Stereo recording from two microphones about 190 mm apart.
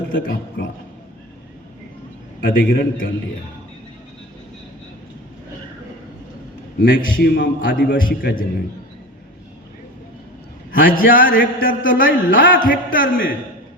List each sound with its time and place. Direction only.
0.2 s a man's voice: 55° left (ahead or behind)
2.5 s a man's voice: 50° left (ahead or behind)
6.8 s a man's voice: 65° left (ahead or behind)
7.7 s a man's voice: 50° left (ahead or behind)
10.7 s a man's voice: 45° left (ahead or behind)